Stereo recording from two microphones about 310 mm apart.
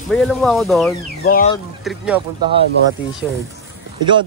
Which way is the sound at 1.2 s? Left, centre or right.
Left.